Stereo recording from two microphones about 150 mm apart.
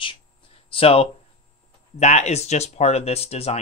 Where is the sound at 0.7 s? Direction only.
40° left (ahead or behind).